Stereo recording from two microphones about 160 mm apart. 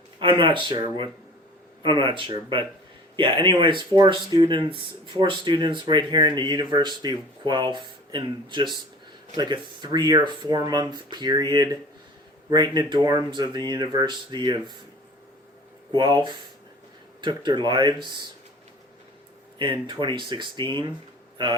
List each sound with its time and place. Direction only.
0.2 s speech: 30° right (ahead or behind)
15.9 s speech: 25° right (ahead or behind)
19.5 s speech: 30° right (ahead or behind)